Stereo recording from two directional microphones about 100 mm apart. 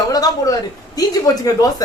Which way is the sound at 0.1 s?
40° left (ahead or behind).